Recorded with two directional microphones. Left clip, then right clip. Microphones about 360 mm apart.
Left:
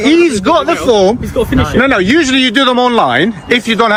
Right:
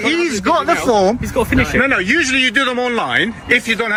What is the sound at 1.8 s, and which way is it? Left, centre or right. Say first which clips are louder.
A man's voice: left 6 dB; centre.